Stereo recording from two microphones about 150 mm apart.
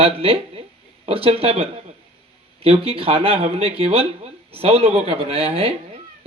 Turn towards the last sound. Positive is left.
turn(degrees=-40)  # may be behind; listen again after turning